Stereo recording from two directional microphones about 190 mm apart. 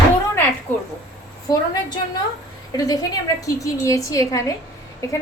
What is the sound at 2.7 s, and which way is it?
A woman's voice, 20° left (ahead or behind).